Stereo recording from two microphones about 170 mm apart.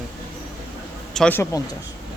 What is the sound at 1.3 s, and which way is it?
Speech, 20° left (ahead or behind).